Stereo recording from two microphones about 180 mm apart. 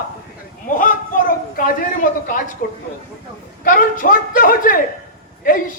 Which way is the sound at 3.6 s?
50° left (ahead or behind).